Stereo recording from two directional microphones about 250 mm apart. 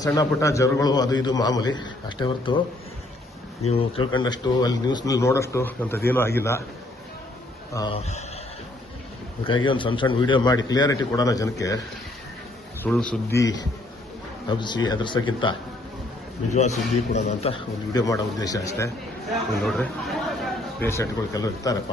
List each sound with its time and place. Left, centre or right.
0.0 s a man's voice: centre
3.7 s a man's voice: left
7.7 s speech: centre
9.4 s a man's voice: centre
12.8 s a man's voice: centre
16.5 s speech: left
17.9 s a man's voice: centre
19.6 s speech: centre